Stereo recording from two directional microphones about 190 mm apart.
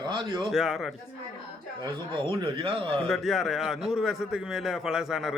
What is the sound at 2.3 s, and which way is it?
Speech, 25° right (ahead or behind).